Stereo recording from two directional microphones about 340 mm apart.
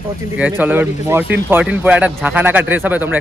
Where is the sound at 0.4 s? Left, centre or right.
Centre.